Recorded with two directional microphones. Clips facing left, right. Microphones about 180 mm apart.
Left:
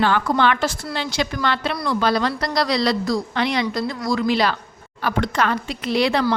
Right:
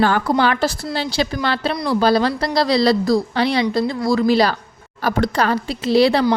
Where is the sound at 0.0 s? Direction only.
40° right (ahead or behind).